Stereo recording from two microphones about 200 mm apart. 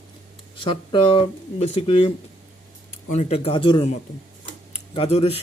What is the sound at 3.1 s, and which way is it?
Speech, 30° left (ahead or behind).